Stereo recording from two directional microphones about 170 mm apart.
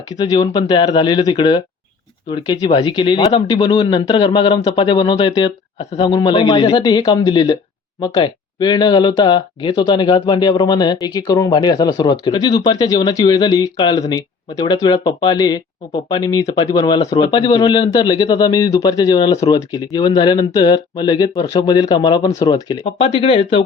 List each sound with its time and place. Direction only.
0.2 s speech: 25° left (ahead or behind)